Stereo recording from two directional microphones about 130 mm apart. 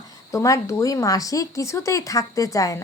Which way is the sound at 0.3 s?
25° left (ahead or behind).